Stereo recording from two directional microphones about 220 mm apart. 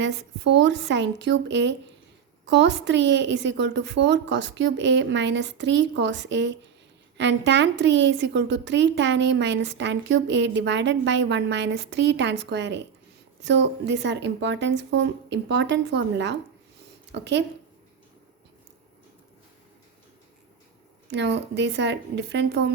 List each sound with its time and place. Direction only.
0.0 s a woman's voice: 50° right (ahead or behind)
21.1 s a woman's voice: 50° right (ahead or behind)